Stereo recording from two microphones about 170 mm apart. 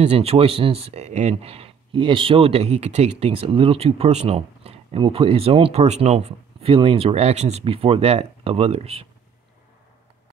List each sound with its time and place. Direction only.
0.0 s speech: 35° right (ahead or behind)